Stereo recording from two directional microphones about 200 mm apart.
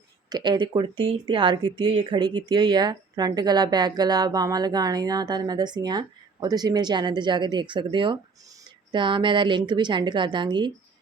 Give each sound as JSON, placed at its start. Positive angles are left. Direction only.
{"t": 0.3, "sound": "speech", "side_deg": -20}